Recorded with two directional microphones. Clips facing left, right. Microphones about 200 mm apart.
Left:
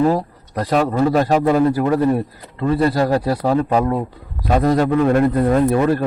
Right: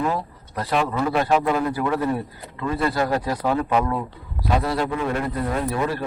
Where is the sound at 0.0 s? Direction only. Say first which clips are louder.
Left 8 dB; 40° left (ahead or behind).